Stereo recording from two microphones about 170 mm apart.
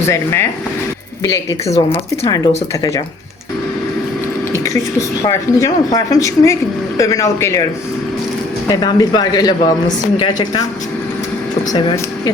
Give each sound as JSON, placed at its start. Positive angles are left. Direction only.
{"t": 0.1, "sound": "speech", "side_deg": 15}
{"t": 4.5, "sound": "speech", "side_deg": 20}
{"t": 8.7, "sound": "speech", "side_deg": 25}
{"t": 11.7, "sound": "speech", "side_deg": 25}